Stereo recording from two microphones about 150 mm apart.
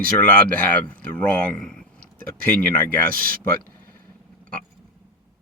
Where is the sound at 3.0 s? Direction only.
75° right (ahead or behind).